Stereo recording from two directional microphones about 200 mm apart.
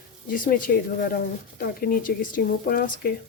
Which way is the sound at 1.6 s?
45° left (ahead or behind).